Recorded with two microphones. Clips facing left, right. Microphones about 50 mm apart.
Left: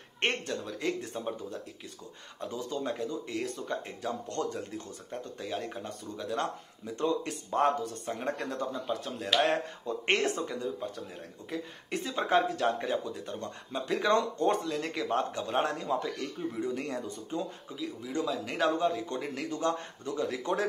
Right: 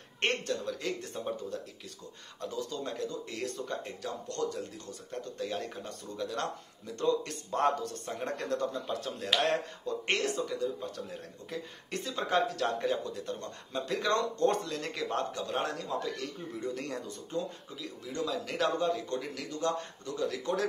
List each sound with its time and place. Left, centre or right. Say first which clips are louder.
0.2 s speech: even; centre
4.0 s speech: left 1 dB; left
5.1 s speech: even; centre
9.8 s speech: left 3 dB; left
10.8 s speech: left 1 dB; centre
19.1 s speech: left 2 dB; left